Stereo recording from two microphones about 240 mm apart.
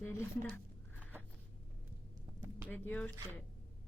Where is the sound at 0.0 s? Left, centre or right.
Centre.